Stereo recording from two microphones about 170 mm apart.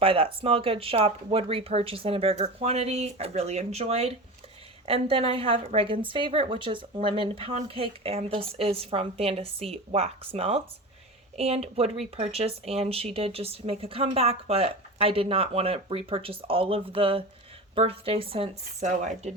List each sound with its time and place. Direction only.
0.0 s speech: 35° right (ahead or behind)